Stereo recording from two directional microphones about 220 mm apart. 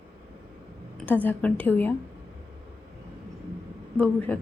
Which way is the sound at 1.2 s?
5° left (ahead or behind).